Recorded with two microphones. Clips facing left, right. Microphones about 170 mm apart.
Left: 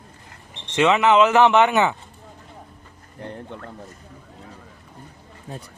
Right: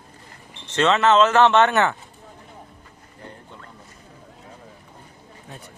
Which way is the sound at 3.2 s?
65° left (ahead or behind).